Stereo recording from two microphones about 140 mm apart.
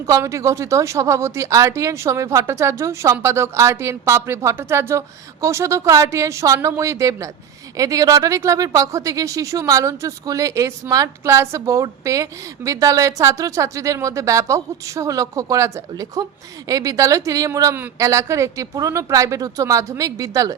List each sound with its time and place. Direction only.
0.0 s speech: 20° right (ahead or behind)